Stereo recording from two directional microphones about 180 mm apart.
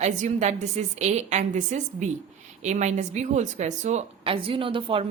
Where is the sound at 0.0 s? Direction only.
45° right (ahead or behind).